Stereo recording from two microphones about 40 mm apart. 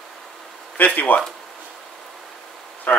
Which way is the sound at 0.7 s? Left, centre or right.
Left.